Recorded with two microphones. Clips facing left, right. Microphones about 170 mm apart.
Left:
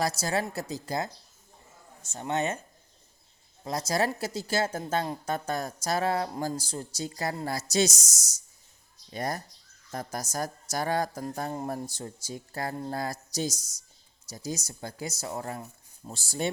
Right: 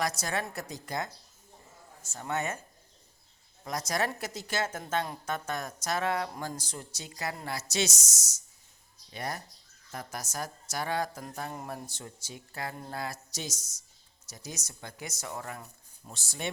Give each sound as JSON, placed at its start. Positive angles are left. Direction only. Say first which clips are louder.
{"t": 0.2, "sound": "a woman's voice", "louder": "left 4 dB", "side_deg": 30}
{"t": 2.1, "sound": "a woman's voice", "louder": "left 4 dB", "side_deg": 25}
{"t": 3.6, "sound": "a woman's voice", "louder": "left 4 dB", "side_deg": 30}
{"t": 7.9, "sound": "speech", "louder": "left 6 dB", "side_deg": 15}
{"t": 9.1, "sound": "a woman's voice", "louder": "left 5 dB", "side_deg": 40}